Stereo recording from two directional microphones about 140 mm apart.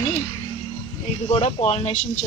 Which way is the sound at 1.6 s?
45° left (ahead or behind).